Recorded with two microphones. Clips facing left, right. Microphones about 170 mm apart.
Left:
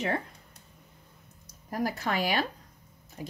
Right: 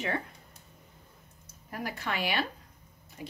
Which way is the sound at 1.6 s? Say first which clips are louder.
Left 5 dB; 40° left (ahead or behind).